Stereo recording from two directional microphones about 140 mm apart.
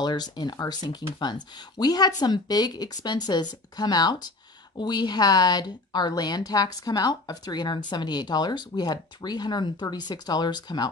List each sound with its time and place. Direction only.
0.0 s a woman's voice: 30° left (ahead or behind)